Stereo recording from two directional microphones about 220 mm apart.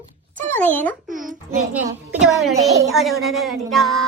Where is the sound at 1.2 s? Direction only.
5° right (ahead or behind).